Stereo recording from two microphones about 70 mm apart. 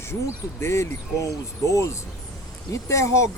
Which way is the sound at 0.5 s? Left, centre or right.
Left.